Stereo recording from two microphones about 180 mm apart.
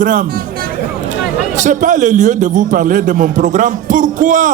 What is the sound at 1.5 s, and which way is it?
A man's voice, 45° right (ahead or behind).